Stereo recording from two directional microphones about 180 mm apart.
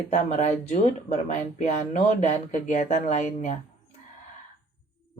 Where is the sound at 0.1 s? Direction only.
40° left (ahead or behind).